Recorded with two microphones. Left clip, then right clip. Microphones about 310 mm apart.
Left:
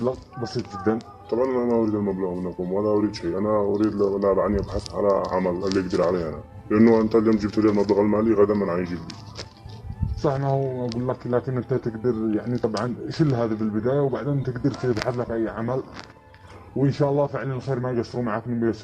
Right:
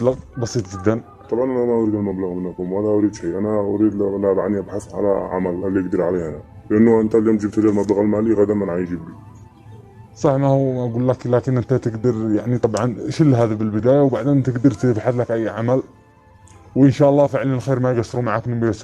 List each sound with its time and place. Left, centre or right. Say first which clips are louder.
0.0 s a man's voice: right 7 dB; right
10.2 s speech: right 7 dB; right
16.8 s speech: right 8 dB; right